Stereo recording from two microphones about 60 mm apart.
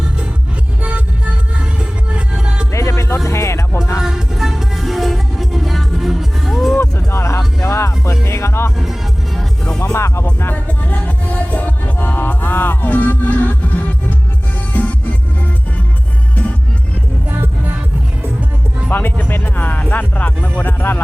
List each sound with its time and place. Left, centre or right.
0.8 s music: right
2.7 s music: left
4.0 s music: centre
6.7 s music: left
8.8 s music: centre
9.6 s music: centre
9.9 s music: left
10.5 s music: left
14.7 s music: left
18.9 s music: left